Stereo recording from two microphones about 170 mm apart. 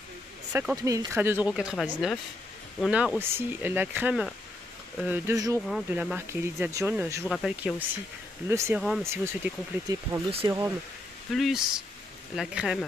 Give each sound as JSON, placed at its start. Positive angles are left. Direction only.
{"t": 0.5, "sound": "speech", "side_deg": -10}
{"t": 7.2, "sound": "speech", "side_deg": -5}
{"t": 8.5, "sound": "speech", "side_deg": -15}
{"t": 11.3, "sound": "speech", "side_deg": 0}